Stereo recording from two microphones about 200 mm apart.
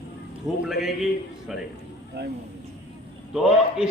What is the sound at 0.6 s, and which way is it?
A man's voice, centre (ahead or behind).